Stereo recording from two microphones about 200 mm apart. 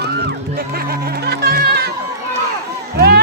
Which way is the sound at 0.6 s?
50° right (ahead or behind).